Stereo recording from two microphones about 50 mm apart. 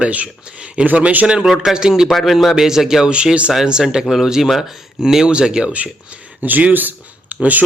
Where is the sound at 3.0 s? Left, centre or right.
Right.